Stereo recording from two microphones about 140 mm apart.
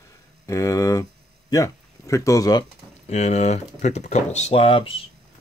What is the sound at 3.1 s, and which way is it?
Speech, 55° left (ahead or behind).